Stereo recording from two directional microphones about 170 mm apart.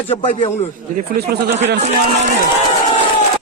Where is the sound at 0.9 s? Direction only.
70° right (ahead or behind).